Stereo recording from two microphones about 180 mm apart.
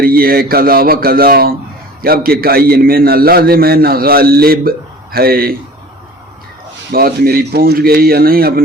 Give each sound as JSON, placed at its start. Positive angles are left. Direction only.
{"t": 0.0, "sound": "a man's voice", "side_deg": -55}
{"t": 6.9, "sound": "a man's voice", "side_deg": -55}